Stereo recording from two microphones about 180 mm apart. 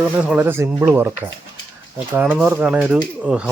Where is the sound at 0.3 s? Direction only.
10° right (ahead or behind).